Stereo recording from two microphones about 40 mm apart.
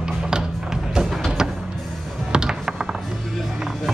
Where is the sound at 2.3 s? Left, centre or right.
Centre.